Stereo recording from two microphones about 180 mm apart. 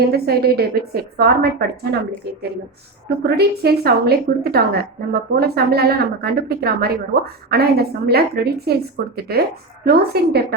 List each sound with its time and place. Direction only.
0.1 s a woman's voice: 60° right (ahead or behind)
3.2 s a woman's voice: 65° right (ahead or behind)